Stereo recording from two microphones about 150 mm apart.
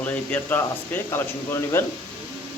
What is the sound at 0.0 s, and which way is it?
Speech, 10° left (ahead or behind).